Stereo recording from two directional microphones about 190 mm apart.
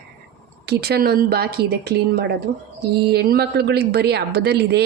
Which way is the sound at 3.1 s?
55° right (ahead or behind).